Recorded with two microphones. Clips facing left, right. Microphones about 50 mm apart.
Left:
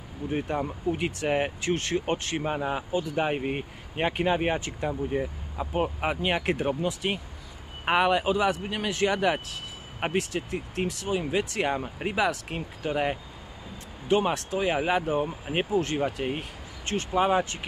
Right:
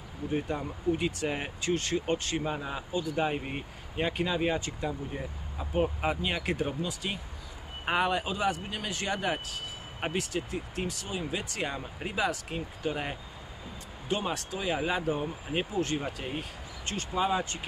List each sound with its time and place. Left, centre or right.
0.3 s speech: left
9.9 s speech: left
11.1 s speech: left
15.0 s speech: left
15.5 s speech: left